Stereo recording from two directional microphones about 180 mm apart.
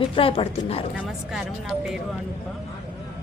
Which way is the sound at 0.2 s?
30° left (ahead or behind).